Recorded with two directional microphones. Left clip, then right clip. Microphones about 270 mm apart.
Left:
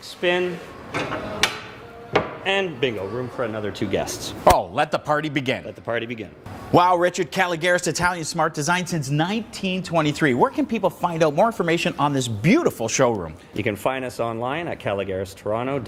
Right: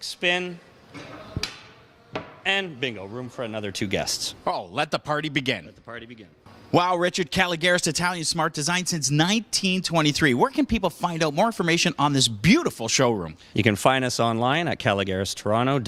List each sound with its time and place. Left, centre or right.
0.2 s speech: right
2.4 s speech: right
3.2 s speech: right
3.9 s speech: right
4.7 s a man's voice: right
13.6 s speech: right